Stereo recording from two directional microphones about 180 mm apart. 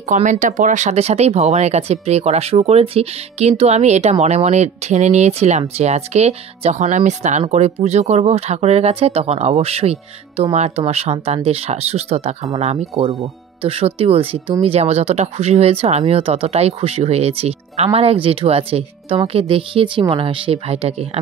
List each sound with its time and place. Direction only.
0.1 s speech: 45° right (ahead or behind)